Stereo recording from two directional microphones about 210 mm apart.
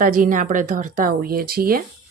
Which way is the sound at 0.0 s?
40° right (ahead or behind).